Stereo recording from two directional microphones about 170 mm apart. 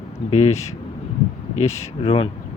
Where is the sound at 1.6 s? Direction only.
35° left (ahead or behind).